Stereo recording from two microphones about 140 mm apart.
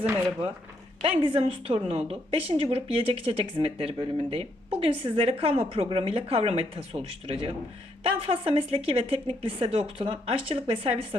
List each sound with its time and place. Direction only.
1.0 s a woman's voice: 40° right (ahead or behind)